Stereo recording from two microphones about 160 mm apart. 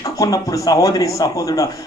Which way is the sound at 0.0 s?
20° left (ahead or behind).